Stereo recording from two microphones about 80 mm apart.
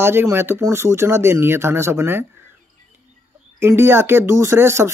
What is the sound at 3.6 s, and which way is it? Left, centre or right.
Speech, right.